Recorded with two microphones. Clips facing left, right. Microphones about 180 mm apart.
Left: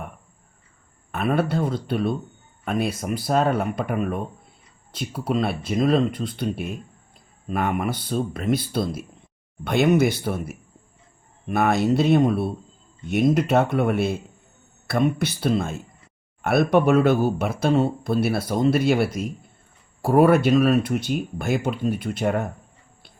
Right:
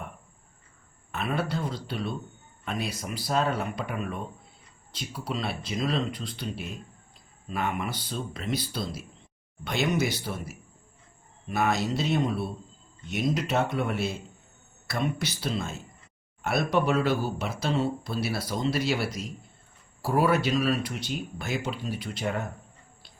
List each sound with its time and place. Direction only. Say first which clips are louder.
1.1 s speech: left 7 dB; 55° left (ahead or behind)